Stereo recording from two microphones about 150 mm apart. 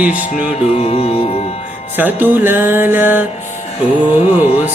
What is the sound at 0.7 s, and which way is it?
Music, 40° left (ahead or behind).